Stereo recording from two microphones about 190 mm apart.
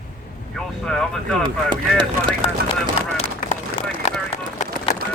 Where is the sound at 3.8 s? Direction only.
30° left (ahead or behind).